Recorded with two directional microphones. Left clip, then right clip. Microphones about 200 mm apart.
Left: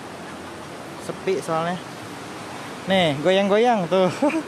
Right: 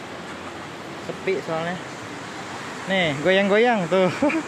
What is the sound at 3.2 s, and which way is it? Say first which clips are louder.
Speech: right 1 dB; 5° left (ahead or behind).